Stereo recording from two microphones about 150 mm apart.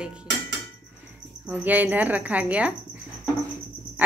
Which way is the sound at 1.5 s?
10° right (ahead or behind).